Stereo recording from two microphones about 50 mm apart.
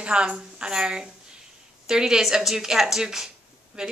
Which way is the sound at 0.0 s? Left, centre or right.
Right.